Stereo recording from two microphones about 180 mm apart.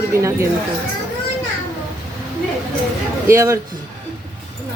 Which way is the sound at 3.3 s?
15° right (ahead or behind).